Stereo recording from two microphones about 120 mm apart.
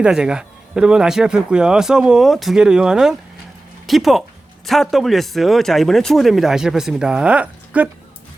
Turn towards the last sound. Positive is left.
turn(degrees=-10)  # may be behind; listen again after turning